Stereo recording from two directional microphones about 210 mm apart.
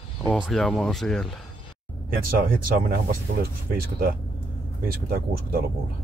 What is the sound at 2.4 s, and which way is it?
Speech, 40° right (ahead or behind).